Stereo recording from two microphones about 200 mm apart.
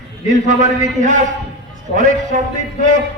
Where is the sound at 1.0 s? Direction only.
40° right (ahead or behind).